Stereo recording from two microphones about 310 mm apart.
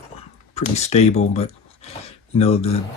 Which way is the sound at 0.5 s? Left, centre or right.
Left.